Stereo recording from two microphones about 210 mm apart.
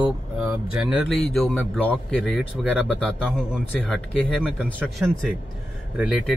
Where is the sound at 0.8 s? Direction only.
Centre (ahead or behind).